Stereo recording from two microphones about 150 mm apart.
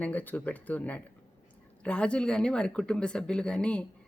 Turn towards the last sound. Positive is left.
turn(degrees=5)  # may be behind; listen again after turning